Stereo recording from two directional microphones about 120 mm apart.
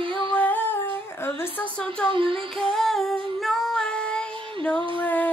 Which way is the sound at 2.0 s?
45° right (ahead or behind).